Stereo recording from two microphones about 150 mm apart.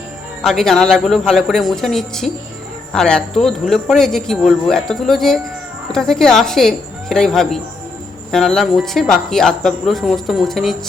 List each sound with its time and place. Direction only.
0.4 s speech: 5° left (ahead or behind)